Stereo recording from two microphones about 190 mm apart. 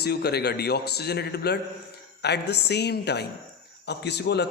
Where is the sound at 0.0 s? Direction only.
60° left (ahead or behind).